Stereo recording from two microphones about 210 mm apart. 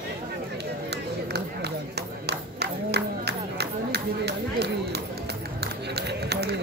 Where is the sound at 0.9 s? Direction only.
50° right (ahead or behind).